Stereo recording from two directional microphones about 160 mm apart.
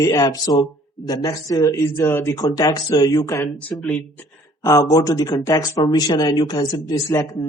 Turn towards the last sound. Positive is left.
turn(degrees=25)  # may be behind; listen again after turning